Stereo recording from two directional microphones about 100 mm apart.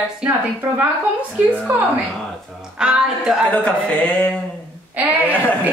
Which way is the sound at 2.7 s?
10° right (ahead or behind).